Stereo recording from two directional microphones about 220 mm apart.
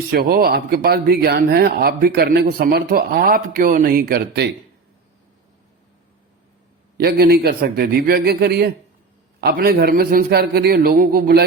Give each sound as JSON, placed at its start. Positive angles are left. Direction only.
{"t": 0.1, "sound": "speech", "side_deg": -45}
{"t": 6.9, "sound": "speech", "side_deg": -45}